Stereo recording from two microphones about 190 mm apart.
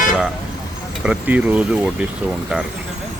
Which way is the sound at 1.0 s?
10° right (ahead or behind).